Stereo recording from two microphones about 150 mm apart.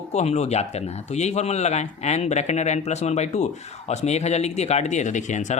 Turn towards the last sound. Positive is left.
turn(degrees=50)  # may be behind; listen again after turning